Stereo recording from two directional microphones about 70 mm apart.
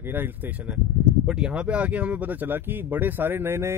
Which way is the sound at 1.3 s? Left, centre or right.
Centre.